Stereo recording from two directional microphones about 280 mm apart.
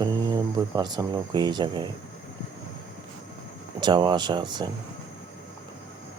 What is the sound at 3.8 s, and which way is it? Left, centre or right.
Speech, centre.